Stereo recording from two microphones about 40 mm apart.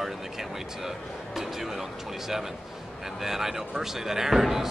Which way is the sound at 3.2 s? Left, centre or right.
Centre.